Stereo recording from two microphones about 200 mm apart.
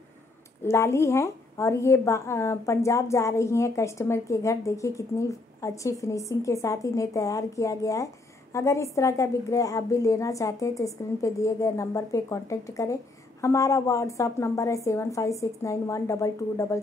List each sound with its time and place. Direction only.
0.7 s a woman's voice: 15° left (ahead or behind)